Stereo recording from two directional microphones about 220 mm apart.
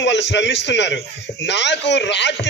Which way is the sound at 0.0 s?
55° left (ahead or behind).